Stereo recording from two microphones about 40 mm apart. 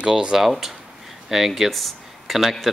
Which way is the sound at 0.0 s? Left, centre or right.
Centre.